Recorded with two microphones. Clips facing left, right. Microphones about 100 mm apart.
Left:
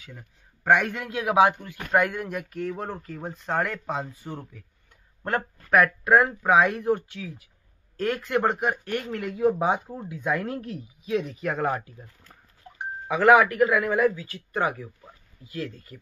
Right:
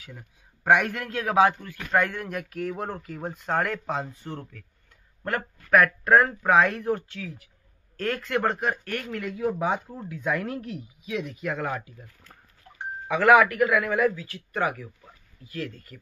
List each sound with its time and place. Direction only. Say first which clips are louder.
0.0 s a man's voice: even; 5° right (ahead or behind)
1.1 s a man's voice: left 1 dB; 15° left (ahead or behind)
5.2 s a man's voice: left 2 dB; 25° left (ahead or behind)
6.0 s speech: even; 10° left (ahead or behind)
9.0 s speech: left 1 dB; 30° left (ahead or behind)
9.4 s speech: left 4 dB; 20° left (ahead or behind)
10.4 s speech: left 1 dB; 30° left (ahead or behind)
13.1 s a man's voice: even; 25° left (ahead or behind)